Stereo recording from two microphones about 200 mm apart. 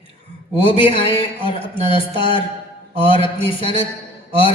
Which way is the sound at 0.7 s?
25° left (ahead or behind).